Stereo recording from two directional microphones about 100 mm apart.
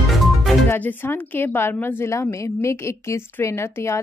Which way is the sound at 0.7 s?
20° left (ahead or behind).